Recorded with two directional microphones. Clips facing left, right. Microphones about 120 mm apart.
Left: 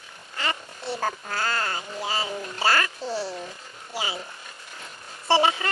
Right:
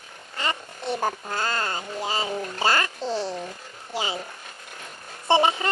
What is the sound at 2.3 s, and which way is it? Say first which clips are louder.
Speech: right 3 dB; 40° right (ahead or behind).